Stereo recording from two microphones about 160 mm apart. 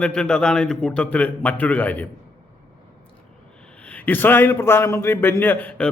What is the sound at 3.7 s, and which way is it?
A man's voice, 10° left (ahead or behind).